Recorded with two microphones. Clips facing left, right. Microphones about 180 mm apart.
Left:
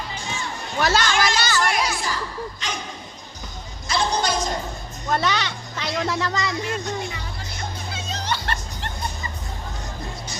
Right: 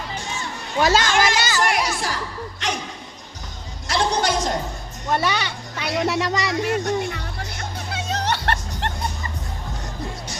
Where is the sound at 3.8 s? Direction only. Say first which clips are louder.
Right 2 dB; 80° right.